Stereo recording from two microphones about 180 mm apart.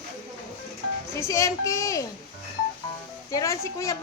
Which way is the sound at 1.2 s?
15° left (ahead or behind).